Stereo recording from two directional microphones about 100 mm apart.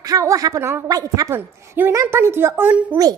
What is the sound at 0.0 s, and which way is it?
A woman's voice, 35° right (ahead or behind).